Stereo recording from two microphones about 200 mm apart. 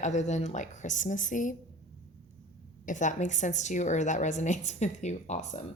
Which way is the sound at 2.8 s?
40° left (ahead or behind).